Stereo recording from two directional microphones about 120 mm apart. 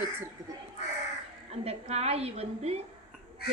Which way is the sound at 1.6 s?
60° right (ahead or behind).